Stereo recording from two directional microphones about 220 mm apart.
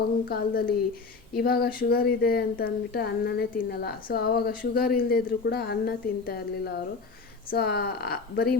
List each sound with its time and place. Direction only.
0.3 s speech: 45° left (ahead or behind)